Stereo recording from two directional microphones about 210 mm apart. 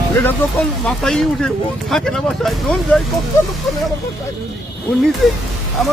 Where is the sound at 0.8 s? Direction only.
Centre (ahead or behind).